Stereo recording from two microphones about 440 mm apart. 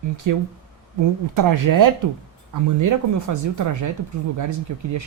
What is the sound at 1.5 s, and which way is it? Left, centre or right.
Speech, right.